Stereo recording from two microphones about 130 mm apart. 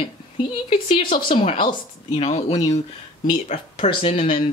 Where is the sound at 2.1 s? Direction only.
60° left (ahead or behind).